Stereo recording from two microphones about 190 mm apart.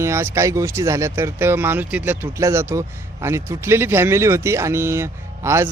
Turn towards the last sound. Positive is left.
turn(degrees=-15)  # may be behind; listen again after turning